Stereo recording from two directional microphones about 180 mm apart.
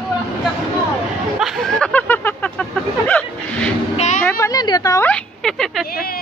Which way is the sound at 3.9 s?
40° left (ahead or behind).